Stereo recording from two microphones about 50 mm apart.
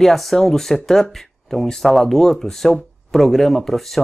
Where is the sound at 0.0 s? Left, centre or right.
Centre.